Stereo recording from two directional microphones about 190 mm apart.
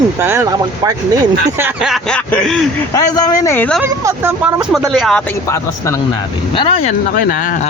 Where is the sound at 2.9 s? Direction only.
20° left (ahead or behind).